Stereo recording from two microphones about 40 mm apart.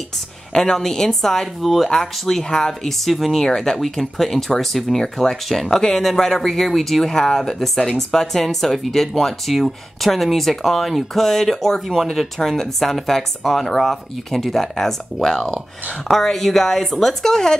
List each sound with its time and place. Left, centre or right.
0.5 s a woman's voice: centre
3.0 s speech: centre
3.4 s speech: centre
3.7 s speech: centre